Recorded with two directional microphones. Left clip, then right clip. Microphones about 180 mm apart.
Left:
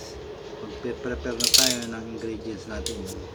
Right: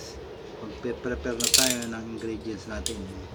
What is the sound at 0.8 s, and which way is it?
Speech, centre (ahead or behind).